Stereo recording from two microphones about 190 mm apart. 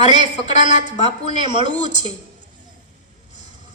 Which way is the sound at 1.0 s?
25° right (ahead or behind).